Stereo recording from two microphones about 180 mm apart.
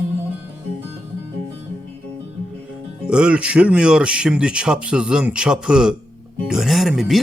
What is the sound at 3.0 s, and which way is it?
Speech, 5° right (ahead or behind).